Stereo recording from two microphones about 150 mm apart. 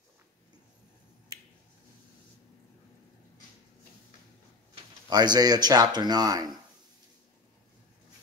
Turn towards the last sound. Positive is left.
turn(degrees=-25)  # may be behind; listen again after turning